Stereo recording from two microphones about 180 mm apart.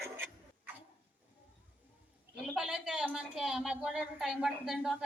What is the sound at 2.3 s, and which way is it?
A woman's voice, centre (ahead or behind).